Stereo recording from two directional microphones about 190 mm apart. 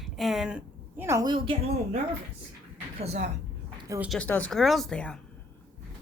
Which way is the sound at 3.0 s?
35° right (ahead or behind).